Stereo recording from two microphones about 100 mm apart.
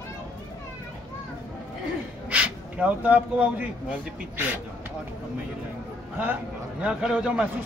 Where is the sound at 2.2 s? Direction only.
10° right (ahead or behind).